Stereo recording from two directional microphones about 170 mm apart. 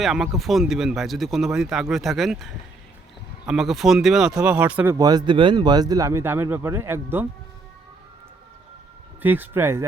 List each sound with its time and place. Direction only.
0.0 s speech: centre (ahead or behind)
4.9 s a man's voice: 25° right (ahead or behind)
9.2 s speech: 10° right (ahead or behind)